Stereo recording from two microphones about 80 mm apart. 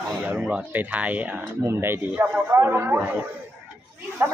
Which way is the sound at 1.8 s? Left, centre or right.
Right.